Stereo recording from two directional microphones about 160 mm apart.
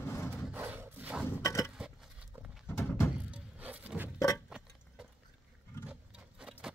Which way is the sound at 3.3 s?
10° right (ahead or behind).